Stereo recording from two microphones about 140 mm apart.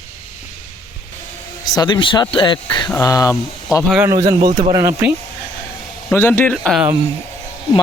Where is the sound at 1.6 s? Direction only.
30° left (ahead or behind).